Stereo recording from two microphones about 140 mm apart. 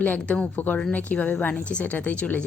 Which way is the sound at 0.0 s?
10° left (ahead or behind).